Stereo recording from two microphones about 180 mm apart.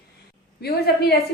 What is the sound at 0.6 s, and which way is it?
Speech, 60° left (ahead or behind).